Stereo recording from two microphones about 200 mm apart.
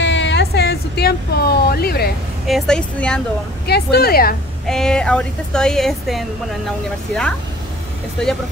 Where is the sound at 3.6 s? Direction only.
55° left (ahead or behind).